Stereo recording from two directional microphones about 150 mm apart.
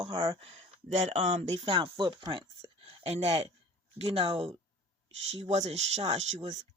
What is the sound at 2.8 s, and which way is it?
Speech, 45° right (ahead or behind).